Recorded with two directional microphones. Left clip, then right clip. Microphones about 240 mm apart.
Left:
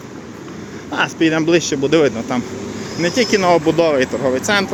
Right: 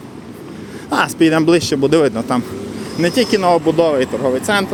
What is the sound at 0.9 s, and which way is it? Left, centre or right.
Speech, centre.